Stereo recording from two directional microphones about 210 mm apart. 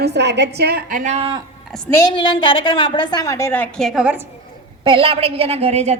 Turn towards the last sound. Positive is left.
turn(degrees=-30)  # may be behind; listen again after turning